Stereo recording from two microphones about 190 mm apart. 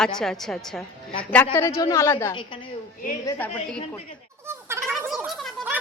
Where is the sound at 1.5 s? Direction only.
15° left (ahead or behind).